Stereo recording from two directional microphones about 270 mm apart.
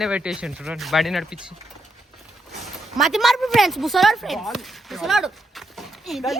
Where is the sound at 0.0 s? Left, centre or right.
Centre.